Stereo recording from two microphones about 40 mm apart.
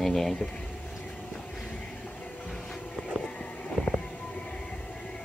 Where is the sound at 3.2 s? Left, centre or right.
Left.